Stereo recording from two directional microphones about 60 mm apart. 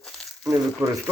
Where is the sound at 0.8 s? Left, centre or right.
Right.